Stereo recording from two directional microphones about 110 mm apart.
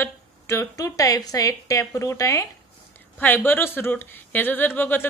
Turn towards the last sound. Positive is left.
turn(degrees=20)  # may be behind; listen again after turning